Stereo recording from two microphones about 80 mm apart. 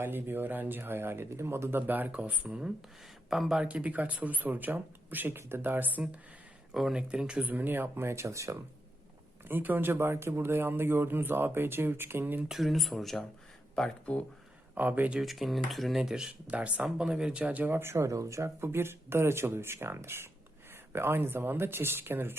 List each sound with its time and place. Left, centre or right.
0.0 s speech: right
6.7 s speech: centre; by 8.5 s right
9.4 s speech: right
12.5 s speech: centre
14.8 s speech: right
15.2 s speech: centre; by 22.4 s right